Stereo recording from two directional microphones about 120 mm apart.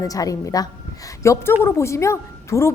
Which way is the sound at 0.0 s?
30° left (ahead or behind).